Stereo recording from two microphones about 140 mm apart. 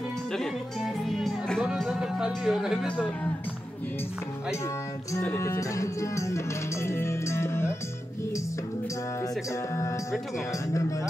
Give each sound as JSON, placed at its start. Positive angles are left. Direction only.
{"t": 0.3, "sound": "music", "side_deg": 0}
{"t": 5.2, "sound": "music", "side_deg": 20}